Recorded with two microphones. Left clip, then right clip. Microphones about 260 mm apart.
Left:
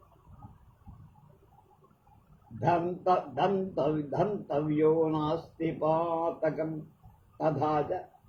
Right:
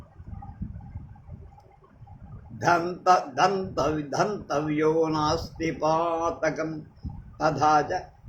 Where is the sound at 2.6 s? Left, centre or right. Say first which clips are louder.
Right 6 dB; right.